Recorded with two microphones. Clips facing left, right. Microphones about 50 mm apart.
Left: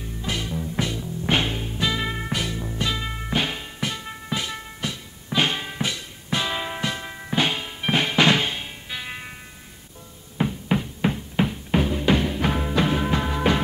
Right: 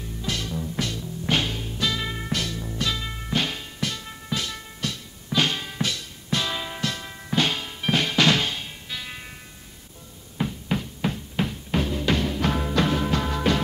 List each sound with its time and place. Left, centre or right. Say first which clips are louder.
0.0 s music: left 1 dB; centre
10.3 s music: left 4 dB; centre